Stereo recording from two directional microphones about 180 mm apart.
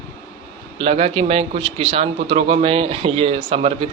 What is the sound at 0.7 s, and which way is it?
A man's voice, 30° right (ahead or behind).